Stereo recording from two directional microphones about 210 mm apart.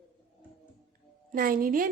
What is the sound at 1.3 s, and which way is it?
Speech, 45° right (ahead or behind).